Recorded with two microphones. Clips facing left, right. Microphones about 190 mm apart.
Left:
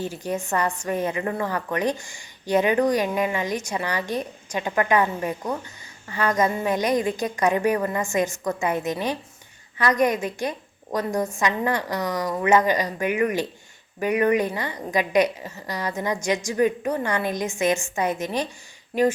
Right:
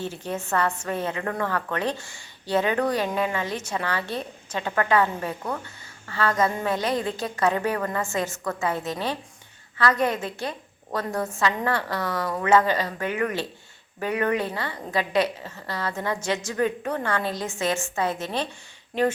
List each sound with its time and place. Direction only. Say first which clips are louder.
0.0 s speech: left 3 dB; 10° left (ahead or behind)